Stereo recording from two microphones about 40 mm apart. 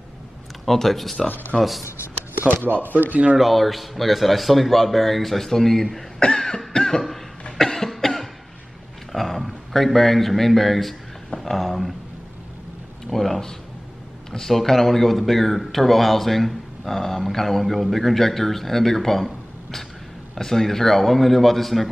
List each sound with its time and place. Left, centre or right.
0.7 s speech: centre
2.8 s speech: right
3.3 s speech: centre
6.2 s cough: centre
6.7 s chuckle: centre
7.5 s cough: centre
9.1 s a man's voice: centre
13.0 s a sound: centre
14.3 s speech: centre